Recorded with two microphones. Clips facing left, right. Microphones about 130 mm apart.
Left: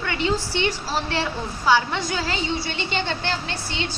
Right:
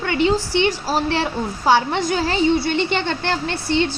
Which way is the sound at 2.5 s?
55° right (ahead or behind).